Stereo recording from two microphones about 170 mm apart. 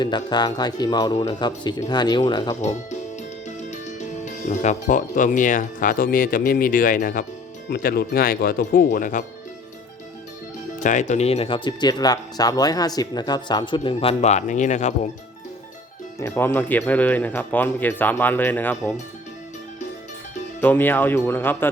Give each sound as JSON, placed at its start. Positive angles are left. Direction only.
{"t": 0.0, "sound": "speech", "side_deg": 25}
{"t": 3.7, "sound": "speech", "side_deg": 45}
{"t": 7.7, "sound": "speech", "side_deg": 65}
{"t": 10.8, "sound": "speech", "side_deg": 45}
{"t": 16.2, "sound": "speech", "side_deg": 15}
{"t": 20.6, "sound": "speech", "side_deg": 10}